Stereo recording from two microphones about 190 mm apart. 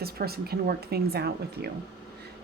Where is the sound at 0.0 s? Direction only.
55° right (ahead or behind).